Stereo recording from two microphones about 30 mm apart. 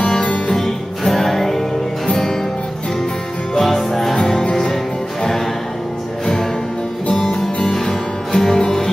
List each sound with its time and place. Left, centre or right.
0.6 s music: centre
3.5 s music: centre
7.7 s music: centre